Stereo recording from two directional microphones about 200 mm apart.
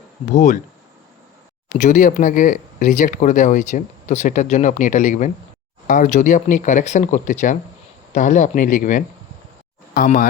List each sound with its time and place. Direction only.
0.3 s speech: 40° left (ahead or behind)
1.8 s speech: 40° left (ahead or behind)